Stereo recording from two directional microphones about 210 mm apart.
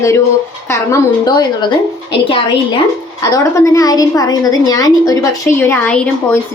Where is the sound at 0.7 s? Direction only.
15° left (ahead or behind).